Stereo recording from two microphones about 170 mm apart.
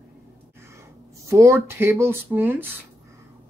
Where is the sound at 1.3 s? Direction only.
15° right (ahead or behind).